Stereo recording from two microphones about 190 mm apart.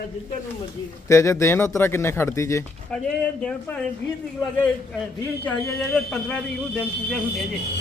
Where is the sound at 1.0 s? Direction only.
15° left (ahead or behind).